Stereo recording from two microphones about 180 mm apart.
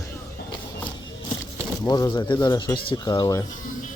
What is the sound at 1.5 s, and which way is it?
Speech, 15° left (ahead or behind).